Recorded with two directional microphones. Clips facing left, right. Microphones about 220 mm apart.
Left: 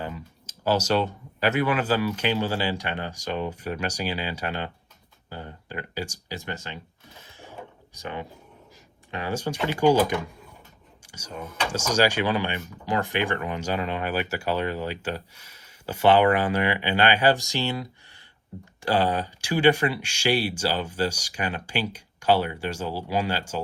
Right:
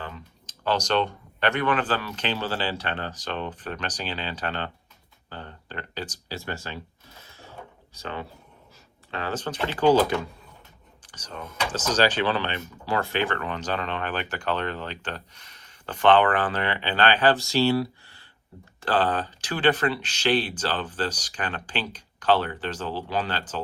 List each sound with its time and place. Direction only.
0.0 s speech: 10° left (ahead or behind)
7.3 s a sound: 15° left (ahead or behind)
7.9 s speech: 15° left (ahead or behind)